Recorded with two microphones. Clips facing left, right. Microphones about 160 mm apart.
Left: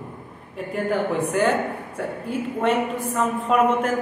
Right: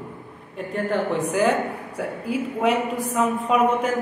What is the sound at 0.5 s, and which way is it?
A woman's voice, 5° left (ahead or behind).